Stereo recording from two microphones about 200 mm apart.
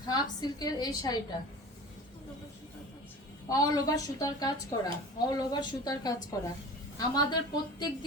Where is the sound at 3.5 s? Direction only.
15° left (ahead or behind).